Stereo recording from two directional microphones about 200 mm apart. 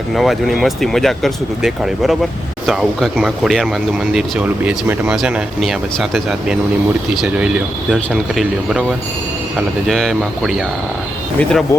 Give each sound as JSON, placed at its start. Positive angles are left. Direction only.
{"t": 0.1, "sound": "speech", "side_deg": 0}